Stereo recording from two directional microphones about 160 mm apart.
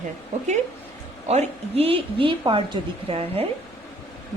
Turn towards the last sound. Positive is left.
turn(degrees=-35)  # may be behind; listen again after turning